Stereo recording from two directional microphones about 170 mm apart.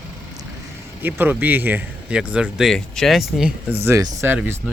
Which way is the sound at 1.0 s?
10° right (ahead or behind).